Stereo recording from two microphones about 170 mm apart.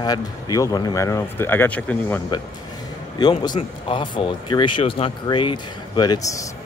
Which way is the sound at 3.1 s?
25° left (ahead or behind).